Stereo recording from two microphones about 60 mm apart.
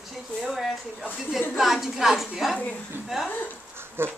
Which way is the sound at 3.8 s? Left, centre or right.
Right.